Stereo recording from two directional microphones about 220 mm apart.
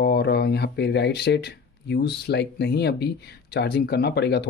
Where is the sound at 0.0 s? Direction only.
50° left (ahead or behind).